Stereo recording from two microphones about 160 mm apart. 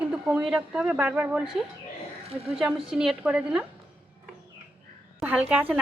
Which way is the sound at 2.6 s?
5° right (ahead or behind).